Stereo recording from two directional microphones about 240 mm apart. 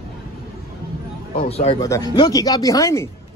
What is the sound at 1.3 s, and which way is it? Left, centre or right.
Speech, left.